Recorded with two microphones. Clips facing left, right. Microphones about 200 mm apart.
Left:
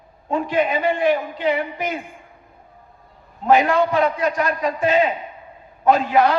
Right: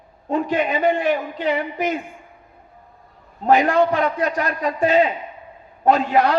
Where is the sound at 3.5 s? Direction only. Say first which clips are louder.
Even; 40° right (ahead or behind).